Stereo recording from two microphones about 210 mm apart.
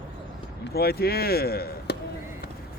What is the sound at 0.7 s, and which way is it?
Speech, 45° left (ahead or behind).